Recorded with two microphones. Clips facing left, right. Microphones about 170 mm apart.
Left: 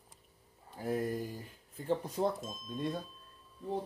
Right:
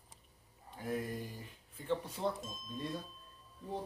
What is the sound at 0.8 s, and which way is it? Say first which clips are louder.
Speech: left 5 dB; 40° left (ahead or behind).